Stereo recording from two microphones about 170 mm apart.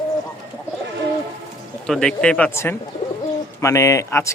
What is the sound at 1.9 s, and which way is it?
A man's voice, 5° left (ahead or behind).